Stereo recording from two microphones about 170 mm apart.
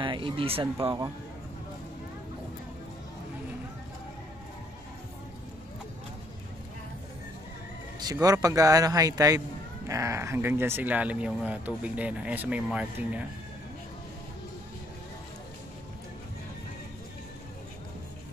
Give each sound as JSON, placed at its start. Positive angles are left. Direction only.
{"t": 0.0, "sound": "speech", "side_deg": -30}
{"t": 8.0, "sound": "a man's voice", "side_deg": -20}